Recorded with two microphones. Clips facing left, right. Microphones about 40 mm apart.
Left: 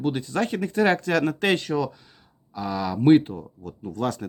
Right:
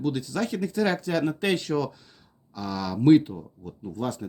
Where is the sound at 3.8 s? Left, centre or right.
Left.